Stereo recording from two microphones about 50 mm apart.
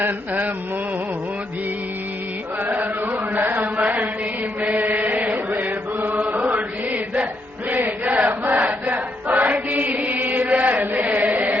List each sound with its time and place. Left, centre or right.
0.0 s mantra: right
3.1 s chant: right